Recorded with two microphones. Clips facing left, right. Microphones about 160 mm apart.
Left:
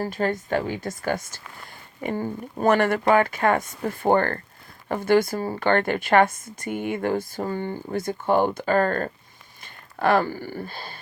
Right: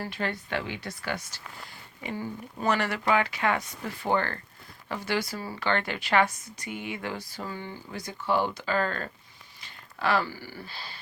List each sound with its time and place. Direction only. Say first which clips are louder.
0.0 s speech: left 7 dB; 45° left (ahead or behind)